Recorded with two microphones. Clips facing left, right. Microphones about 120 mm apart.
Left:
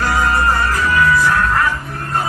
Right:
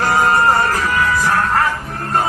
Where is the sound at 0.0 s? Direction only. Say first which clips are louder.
Right 2 dB; 40° right (ahead or behind).